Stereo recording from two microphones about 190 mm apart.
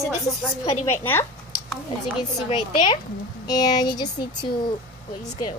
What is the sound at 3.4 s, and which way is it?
A woman's voice, 20° left (ahead or behind).